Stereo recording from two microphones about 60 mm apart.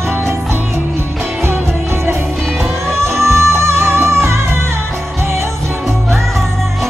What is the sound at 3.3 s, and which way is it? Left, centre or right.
Music, right.